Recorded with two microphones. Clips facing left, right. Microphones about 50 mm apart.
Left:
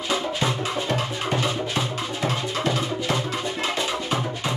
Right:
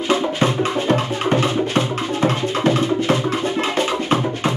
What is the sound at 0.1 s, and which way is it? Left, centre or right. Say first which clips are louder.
Music: right 6 dB; right.